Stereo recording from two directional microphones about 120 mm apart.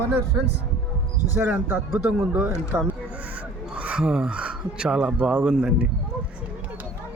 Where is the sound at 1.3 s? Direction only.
20° right (ahead or behind).